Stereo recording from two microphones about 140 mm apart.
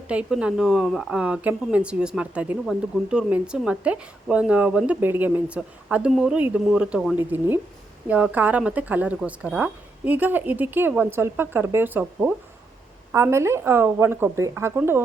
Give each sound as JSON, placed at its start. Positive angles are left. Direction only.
{"t": 0.1, "sound": "speech", "side_deg": -10}